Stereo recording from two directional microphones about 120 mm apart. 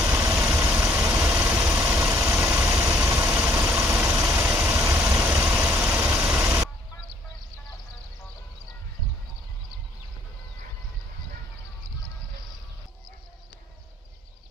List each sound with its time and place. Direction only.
0.1 s vehicle: 25° right (ahead or behind)
4.0 s vehicle: 25° right (ahead or behind); by 6.5 s 10° right (ahead or behind)